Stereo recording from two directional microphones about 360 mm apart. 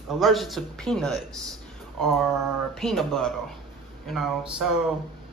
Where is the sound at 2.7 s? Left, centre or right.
Centre.